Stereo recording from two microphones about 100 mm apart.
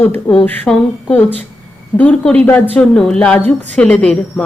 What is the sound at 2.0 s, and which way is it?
Speech, 15° left (ahead or behind).